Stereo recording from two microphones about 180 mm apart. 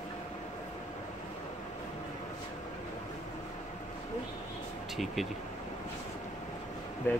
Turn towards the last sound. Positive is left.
turn(degrees=10)  # may be behind; listen again after turning